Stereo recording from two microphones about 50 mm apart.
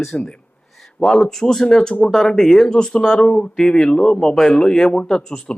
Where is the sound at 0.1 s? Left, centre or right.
Centre.